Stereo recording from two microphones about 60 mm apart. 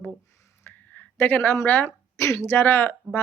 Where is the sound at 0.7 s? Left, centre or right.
Left.